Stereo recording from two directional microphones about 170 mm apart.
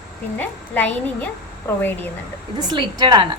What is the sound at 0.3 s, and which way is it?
A woman's voice, 10° left (ahead or behind).